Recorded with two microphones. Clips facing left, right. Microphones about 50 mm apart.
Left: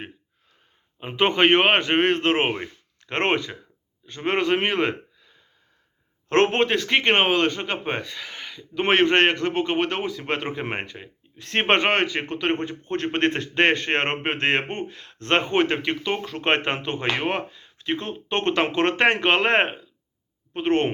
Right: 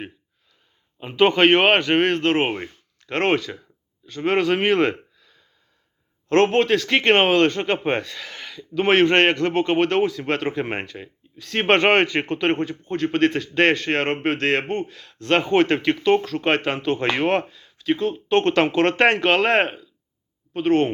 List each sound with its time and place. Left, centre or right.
0.9 s speech: centre
6.2 s speech: left
6.8 s speech: centre
11.3 s a man's voice: left
11.6 s speech: centre
13.1 s a man's voice: left
13.5 s speech: centre
16.4 s speech: left